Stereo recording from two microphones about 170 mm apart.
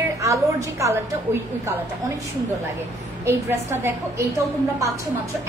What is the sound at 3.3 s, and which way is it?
A woman's voice, 15° right (ahead or behind).